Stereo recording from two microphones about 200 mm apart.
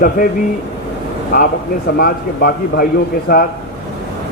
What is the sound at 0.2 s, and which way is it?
Speech, 40° left (ahead or behind).